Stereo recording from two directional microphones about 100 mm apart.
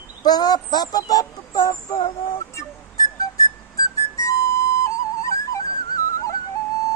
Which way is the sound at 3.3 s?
35° left (ahead or behind).